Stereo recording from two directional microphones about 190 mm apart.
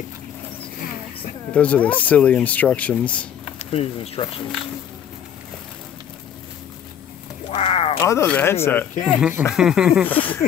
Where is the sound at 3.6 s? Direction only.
30° left (ahead or behind).